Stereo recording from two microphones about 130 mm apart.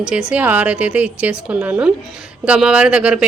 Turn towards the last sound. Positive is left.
turn(degrees=-10)  # may be behind; listen again after turning